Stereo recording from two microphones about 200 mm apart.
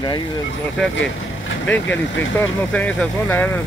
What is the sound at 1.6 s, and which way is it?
Speech, 10° left (ahead or behind).